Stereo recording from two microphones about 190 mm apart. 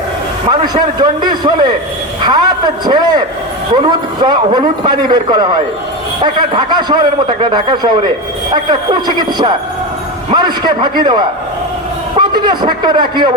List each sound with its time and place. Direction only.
0.6 s a man's voice: 20° right (ahead or behind)